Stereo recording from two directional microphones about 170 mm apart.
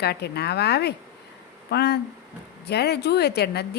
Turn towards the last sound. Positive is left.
turn(degrees=75)  # may be behind; listen again after turning